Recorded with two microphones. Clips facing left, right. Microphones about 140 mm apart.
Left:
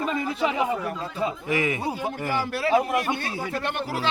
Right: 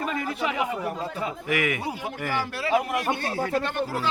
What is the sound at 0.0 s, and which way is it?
A man's voice, 30° left (ahead or behind).